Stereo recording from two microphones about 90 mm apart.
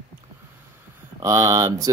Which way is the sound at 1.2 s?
30° right (ahead or behind).